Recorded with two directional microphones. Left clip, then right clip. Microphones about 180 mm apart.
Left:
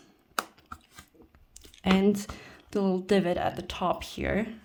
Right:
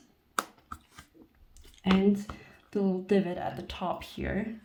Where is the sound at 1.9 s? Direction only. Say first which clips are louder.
Left 1 dB; 60° left (ahead or behind).